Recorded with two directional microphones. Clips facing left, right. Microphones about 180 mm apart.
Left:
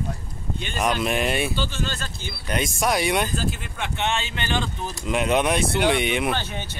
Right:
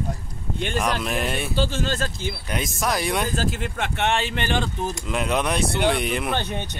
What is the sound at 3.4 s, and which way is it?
Speech, 80° right.